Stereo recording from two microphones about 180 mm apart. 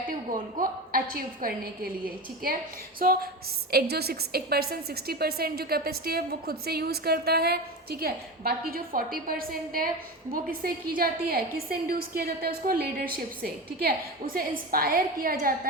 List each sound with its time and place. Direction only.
0.6 s a woman's voice: 55° right (ahead or behind)
3.0 s a woman's voice: 55° right (ahead or behind)